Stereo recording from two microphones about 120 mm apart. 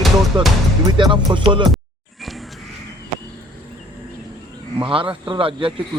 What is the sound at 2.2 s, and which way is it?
Music, centre (ahead or behind).